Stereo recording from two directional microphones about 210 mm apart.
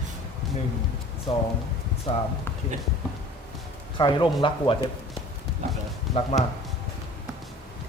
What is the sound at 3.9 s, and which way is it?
Speech, 20° left (ahead or behind).